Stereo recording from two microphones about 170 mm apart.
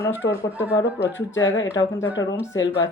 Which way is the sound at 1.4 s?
90° left.